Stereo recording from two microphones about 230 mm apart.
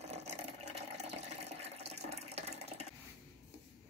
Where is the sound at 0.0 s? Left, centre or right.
Right.